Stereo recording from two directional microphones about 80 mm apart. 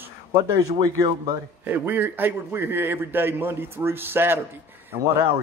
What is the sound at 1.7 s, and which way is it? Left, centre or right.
A man's voice, right.